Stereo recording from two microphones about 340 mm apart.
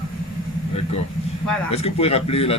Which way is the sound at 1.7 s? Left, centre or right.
Centre.